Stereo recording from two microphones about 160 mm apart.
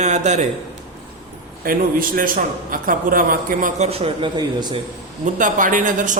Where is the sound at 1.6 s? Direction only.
65° right (ahead or behind).